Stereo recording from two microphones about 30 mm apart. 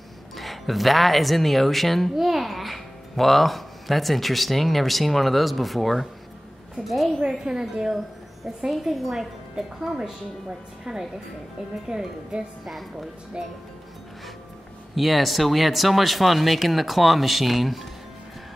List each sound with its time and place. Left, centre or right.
0.4 s a child's voice: centre
2.1 s a child's voice: centre
7.5 s speech: right
8.6 s a woman's voice: centre; by 13.5 s right
15.0 s a child's voice: centre